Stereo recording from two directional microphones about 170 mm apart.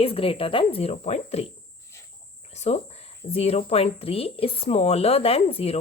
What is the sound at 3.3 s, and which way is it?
A woman's voice, 35° left (ahead or behind).